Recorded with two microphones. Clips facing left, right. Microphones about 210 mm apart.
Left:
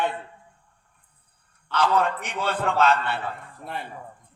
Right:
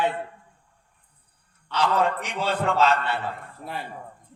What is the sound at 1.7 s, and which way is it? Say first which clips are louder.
Speech: even; 55° left (ahead or behind).